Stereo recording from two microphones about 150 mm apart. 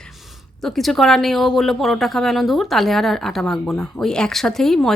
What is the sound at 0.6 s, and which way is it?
Speech, centre (ahead or behind).